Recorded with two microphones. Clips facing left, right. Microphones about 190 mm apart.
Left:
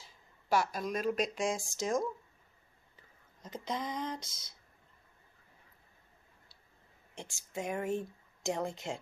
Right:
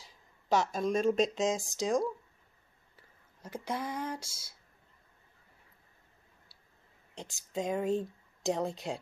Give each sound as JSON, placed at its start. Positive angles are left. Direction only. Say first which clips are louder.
{"t": 0.0, "sound": "speech", "louder": "right 1 dB", "side_deg": -20}
{"t": 3.0, "sound": "speech", "louder": "right 2 dB", "side_deg": -10}
{"t": 7.2, "sound": "speech", "louder": "right 4 dB", "side_deg": -15}